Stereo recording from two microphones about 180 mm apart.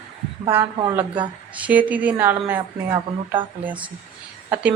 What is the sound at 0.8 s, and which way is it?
Speech, 25° right (ahead or behind).